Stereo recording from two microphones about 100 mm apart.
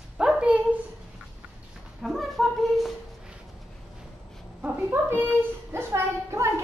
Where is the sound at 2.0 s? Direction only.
Centre (ahead or behind).